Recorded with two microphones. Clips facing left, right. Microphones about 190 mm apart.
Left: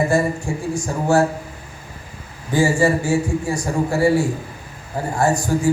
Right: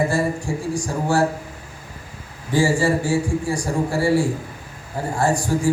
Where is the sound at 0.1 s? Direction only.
35° right (ahead or behind).